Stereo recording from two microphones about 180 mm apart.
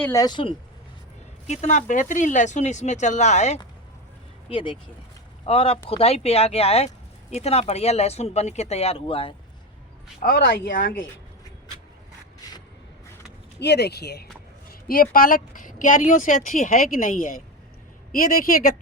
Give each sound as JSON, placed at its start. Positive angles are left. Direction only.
{"t": 0.0, "sound": "speech", "side_deg": 20}
{"t": 1.5, "sound": "speech", "side_deg": 45}
{"t": 4.5, "sound": "speech", "side_deg": 30}
{"t": 10.2, "sound": "speech", "side_deg": 60}
{"t": 13.6, "sound": "speech", "side_deg": 65}
{"t": 14.7, "sound": "speech", "side_deg": 55}